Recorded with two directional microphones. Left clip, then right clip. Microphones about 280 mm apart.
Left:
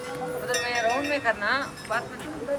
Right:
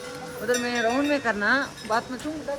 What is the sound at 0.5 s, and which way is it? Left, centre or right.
Speech, left.